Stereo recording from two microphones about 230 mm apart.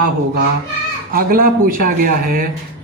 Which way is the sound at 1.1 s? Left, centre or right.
Right.